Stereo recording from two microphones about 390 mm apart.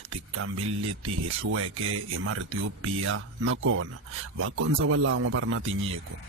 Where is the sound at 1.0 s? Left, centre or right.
Right.